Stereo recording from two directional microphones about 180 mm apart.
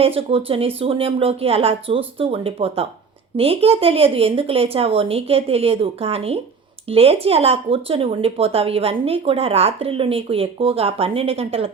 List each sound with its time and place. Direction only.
0.0 s speech: 30° right (ahead or behind)